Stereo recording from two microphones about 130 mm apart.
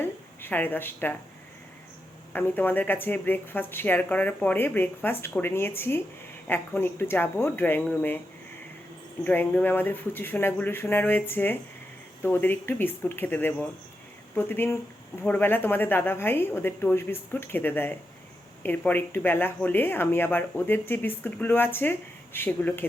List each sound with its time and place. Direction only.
0.4 s speech: 15° left (ahead or behind)
2.3 s speech: 15° left (ahead or behind)
9.2 s speech: 15° left (ahead or behind)